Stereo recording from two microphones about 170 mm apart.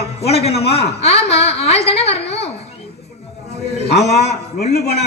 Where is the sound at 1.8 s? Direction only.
35° left (ahead or behind).